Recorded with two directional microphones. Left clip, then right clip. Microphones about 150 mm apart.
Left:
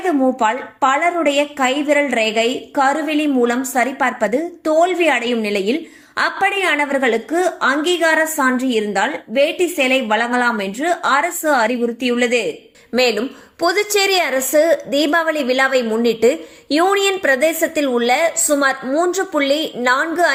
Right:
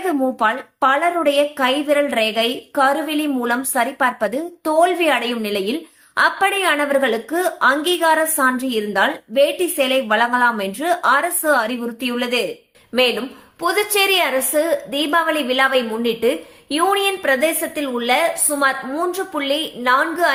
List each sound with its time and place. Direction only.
0.3 s a woman's voice: 10° left (ahead or behind)
12.9 s a woman's voice: 40° left (ahead or behind)